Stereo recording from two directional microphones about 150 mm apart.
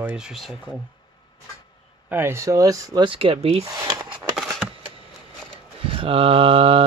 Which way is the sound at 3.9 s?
25° right (ahead or behind).